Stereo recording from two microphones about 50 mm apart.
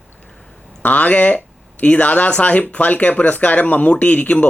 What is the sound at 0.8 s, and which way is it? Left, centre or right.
Speech, left.